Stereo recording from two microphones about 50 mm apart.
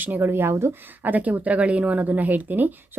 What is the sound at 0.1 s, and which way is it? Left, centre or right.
Speech, right.